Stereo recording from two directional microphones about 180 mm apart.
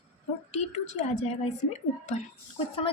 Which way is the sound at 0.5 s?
40° left (ahead or behind).